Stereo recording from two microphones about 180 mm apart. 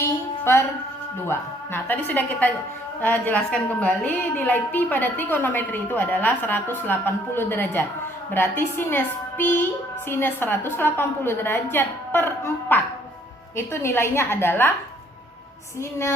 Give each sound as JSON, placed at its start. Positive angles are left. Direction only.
{"t": 0.0, "sound": "a sound", "side_deg": 15}
{"t": 1.2, "sound": "a woman's voice", "side_deg": 15}
{"t": 15.8, "sound": "a woman's voice", "side_deg": 15}